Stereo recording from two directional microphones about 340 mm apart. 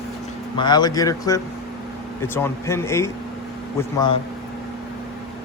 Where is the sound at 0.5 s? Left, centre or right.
Centre.